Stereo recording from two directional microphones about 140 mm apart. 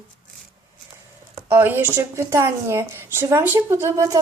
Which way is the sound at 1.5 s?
15° right (ahead or behind).